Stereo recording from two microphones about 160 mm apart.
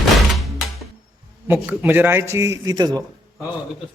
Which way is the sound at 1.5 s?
10° right (ahead or behind).